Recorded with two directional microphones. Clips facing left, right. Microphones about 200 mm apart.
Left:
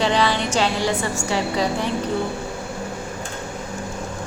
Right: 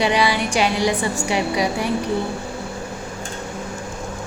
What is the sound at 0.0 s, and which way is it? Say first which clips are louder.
A woman's voice: right 1 dB; 10° right (ahead or behind).